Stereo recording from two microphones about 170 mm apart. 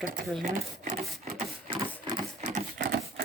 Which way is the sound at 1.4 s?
40° right (ahead or behind).